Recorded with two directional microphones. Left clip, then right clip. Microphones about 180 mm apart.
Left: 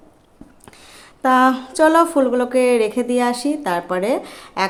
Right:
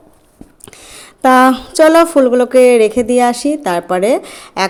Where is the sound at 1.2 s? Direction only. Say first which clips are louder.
Right 6 dB; 35° right (ahead or behind).